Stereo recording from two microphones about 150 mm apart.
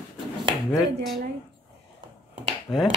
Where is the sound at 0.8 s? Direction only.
Centre (ahead or behind).